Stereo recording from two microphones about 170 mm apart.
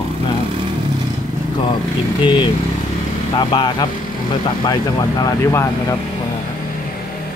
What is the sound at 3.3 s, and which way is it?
Speech, 25° left (ahead or behind).